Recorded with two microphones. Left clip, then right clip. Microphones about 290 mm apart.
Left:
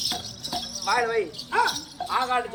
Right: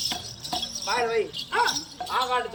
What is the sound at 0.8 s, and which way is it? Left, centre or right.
Speech, centre.